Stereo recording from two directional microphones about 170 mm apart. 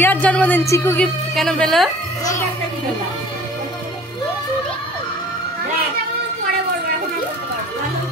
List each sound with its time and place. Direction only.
0.0 s a woman's voice: 10° left (ahead or behind)
1.3 s a woman's voice: 5° left (ahead or behind)